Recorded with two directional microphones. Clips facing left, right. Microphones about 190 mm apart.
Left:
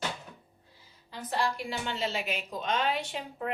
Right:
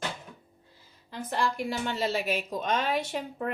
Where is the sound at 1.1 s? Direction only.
50° right (ahead or behind).